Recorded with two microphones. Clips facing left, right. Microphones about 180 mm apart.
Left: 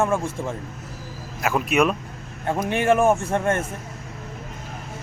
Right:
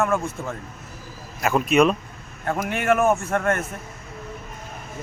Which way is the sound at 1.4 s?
5° left (ahead or behind).